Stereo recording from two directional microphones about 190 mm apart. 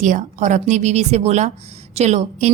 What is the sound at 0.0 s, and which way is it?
A woman's voice, 40° right (ahead or behind).